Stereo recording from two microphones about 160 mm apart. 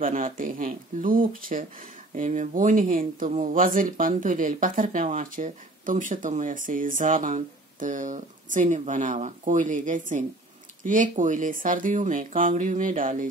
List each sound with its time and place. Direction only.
0.0 s speech: 55° right (ahead or behind)
2.1 s speech: 50° right (ahead or behind)